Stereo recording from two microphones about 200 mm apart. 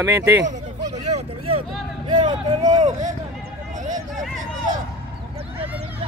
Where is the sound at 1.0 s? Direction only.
30° right (ahead or behind).